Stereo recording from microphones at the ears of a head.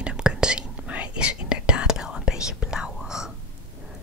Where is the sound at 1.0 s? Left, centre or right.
Left.